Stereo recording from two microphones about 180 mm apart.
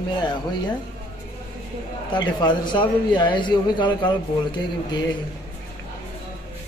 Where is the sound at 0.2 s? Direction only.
25° left (ahead or behind).